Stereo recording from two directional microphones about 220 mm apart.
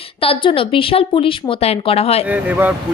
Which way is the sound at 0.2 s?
25° left (ahead or behind).